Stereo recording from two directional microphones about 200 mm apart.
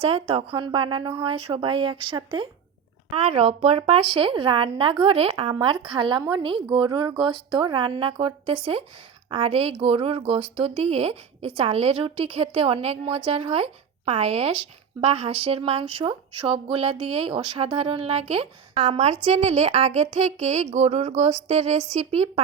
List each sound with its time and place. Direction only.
0.0 s a woman's voice: 30° right (ahead or behind)